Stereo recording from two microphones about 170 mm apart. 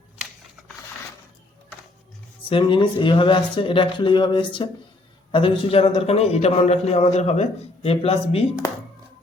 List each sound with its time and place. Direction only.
2.5 s a man's voice: 30° left (ahead or behind)